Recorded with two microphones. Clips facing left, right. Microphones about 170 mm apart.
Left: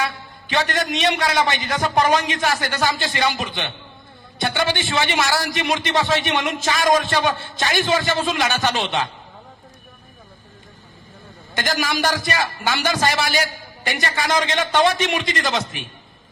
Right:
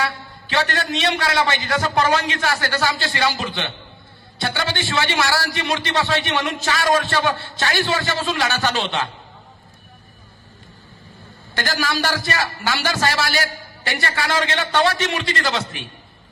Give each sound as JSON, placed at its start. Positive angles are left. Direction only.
{"t": 0.0, "sound": "a man's voice", "side_deg": 15}
{"t": 11.5, "sound": "a man's voice", "side_deg": 20}